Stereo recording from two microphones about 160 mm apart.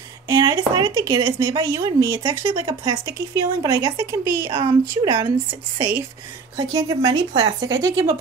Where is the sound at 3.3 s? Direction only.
20° right (ahead or behind).